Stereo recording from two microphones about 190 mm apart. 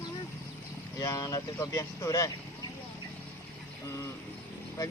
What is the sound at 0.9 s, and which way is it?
Speech, 20° left (ahead or behind).